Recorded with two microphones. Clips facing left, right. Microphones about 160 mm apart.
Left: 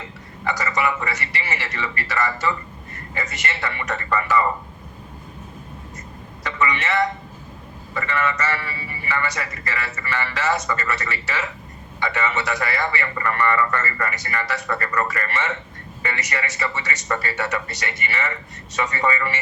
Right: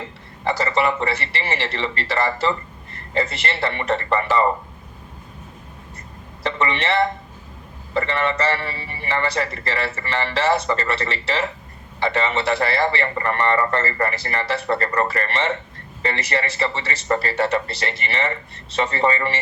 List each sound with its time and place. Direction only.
0.4 s a man's voice: 30° right (ahead or behind)
6.4 s a man's voice: 30° right (ahead or behind)